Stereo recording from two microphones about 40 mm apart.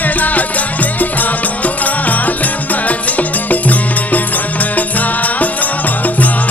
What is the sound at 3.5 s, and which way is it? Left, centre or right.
Music, left.